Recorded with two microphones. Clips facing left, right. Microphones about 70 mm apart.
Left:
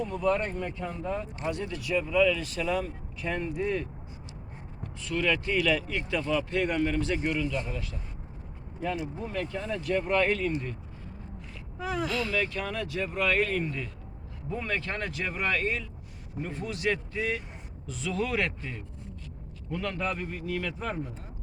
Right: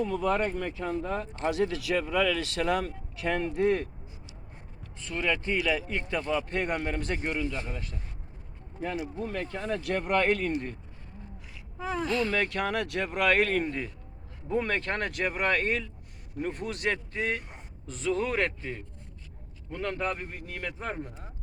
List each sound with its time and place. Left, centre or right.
0.1 s speech: right
1.5 s speech: right
5.0 s speech: right
5.9 s speech: right
6.5 s speech: right
9.3 s speech: right
9.8 s speech: right
12.0 s speech: right
12.5 s speech: right